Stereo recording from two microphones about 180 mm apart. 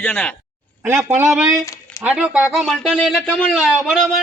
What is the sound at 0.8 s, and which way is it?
A man's voice, 15° right (ahead or behind).